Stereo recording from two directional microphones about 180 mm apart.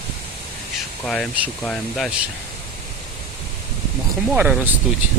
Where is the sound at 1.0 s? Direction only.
Centre (ahead or behind).